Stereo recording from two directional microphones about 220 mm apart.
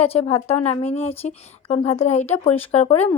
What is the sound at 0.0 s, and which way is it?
A woman's voice, 25° left (ahead or behind).